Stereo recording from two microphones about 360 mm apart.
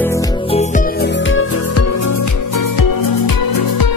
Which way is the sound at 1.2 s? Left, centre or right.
Left.